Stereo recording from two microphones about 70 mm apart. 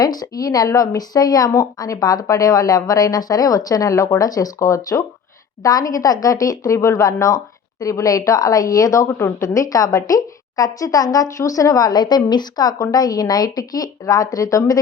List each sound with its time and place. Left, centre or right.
0.0 s a woman's voice: left
9.5 s a woman's voice: left